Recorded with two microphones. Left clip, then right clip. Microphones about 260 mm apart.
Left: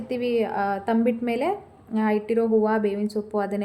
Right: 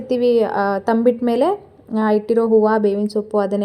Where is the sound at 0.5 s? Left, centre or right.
Centre.